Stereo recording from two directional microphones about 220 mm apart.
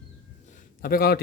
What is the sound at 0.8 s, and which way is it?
Speech, 45° left (ahead or behind).